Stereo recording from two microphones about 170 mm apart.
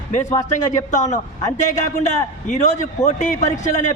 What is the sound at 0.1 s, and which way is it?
A man's voice, 45° left (ahead or behind).